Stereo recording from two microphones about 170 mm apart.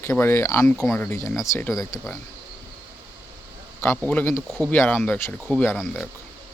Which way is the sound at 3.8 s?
10° left (ahead or behind).